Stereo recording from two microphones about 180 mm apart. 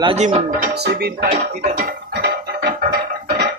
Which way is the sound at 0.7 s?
65° right (ahead or behind).